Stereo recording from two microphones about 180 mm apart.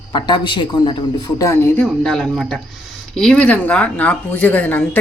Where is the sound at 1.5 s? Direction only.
10° left (ahead or behind).